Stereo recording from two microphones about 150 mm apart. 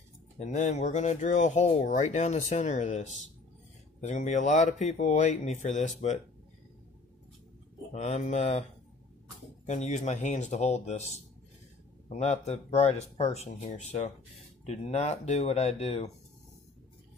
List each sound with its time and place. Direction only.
0.4 s speech: 50° left (ahead or behind)
7.9 s speech: 50° left (ahead or behind)
9.7 s speech: 50° left (ahead or behind)